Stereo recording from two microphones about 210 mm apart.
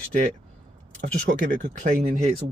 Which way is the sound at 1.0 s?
45° right (ahead or behind).